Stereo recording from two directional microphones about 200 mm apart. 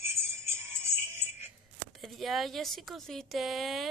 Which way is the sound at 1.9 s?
Centre (ahead or behind).